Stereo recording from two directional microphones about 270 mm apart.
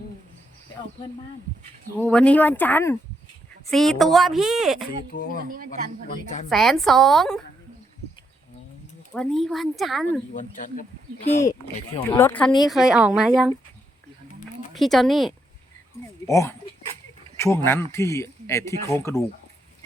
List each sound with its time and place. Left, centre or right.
2.0 s speech: centre
5.4 s speech: right
6.5 s speech: centre
9.1 s speech: centre
10.3 s speech: left
11.9 s speech: centre
14.7 s speech: centre
16.2 s speech: centre